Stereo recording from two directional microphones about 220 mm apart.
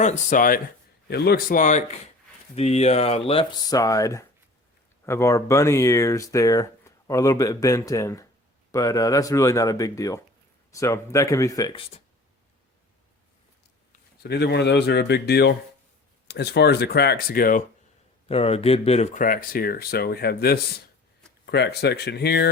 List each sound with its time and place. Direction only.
0.0 s speech: 35° left (ahead or behind)
14.2 s speech: 50° left (ahead or behind)
18.3 s speech: 25° left (ahead or behind); by 22.4 s 50° left (ahead or behind)